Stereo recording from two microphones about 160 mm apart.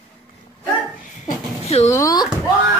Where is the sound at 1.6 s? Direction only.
40° left (ahead or behind).